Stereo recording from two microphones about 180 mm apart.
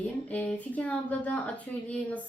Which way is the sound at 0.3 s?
10° left (ahead or behind).